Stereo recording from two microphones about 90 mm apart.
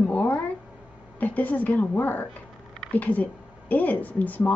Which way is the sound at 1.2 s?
20° left (ahead or behind).